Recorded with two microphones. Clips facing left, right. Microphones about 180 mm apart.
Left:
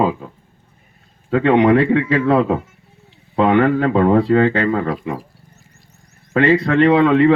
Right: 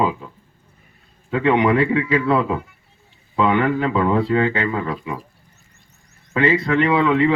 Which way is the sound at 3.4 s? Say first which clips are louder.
Left 5 dB; 35° left (ahead or behind).